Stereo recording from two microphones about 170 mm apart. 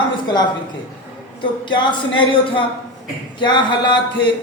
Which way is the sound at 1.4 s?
30° left (ahead or behind).